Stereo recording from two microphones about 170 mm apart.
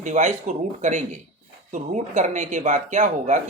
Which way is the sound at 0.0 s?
45° right (ahead or behind).